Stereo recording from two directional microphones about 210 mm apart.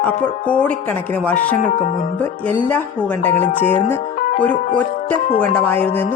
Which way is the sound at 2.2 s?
10° left (ahead or behind).